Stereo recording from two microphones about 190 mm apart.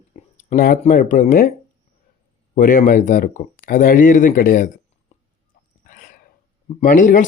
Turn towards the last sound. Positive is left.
turn(degrees=45)  # may be behind; listen again after turning